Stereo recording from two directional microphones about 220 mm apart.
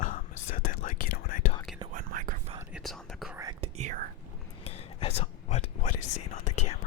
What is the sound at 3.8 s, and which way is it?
Speech, 35° right (ahead or behind).